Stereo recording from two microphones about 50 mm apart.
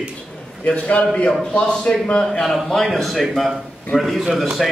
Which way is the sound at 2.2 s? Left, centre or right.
Centre.